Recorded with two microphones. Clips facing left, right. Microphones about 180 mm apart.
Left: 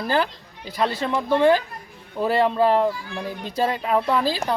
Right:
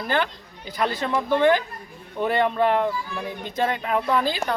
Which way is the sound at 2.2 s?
30° left (ahead or behind).